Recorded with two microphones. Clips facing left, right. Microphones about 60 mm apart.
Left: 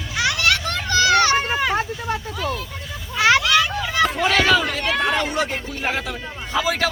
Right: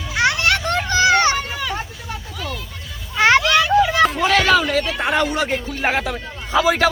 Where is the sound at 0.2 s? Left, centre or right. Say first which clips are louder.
Right 3 dB; right.